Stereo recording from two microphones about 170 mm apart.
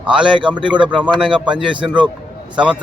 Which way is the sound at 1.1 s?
30° right (ahead or behind).